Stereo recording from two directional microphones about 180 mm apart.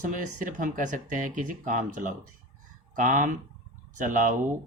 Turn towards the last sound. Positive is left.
turn(degrees=-45)  # may be behind; listen again after turning